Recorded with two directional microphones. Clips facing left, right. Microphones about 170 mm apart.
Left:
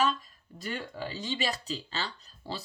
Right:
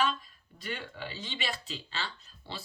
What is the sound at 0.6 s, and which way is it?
Speech, 40° left (ahead or behind).